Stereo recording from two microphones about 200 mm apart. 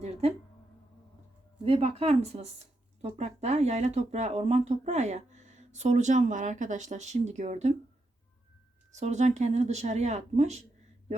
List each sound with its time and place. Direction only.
0.0 s a sound: 30° right (ahead or behind)
1.6 s speech: 30° right (ahead or behind)
8.9 s speech: 35° right (ahead or behind)